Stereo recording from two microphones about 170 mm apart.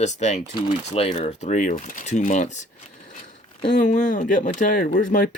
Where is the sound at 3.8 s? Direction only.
45° left (ahead or behind).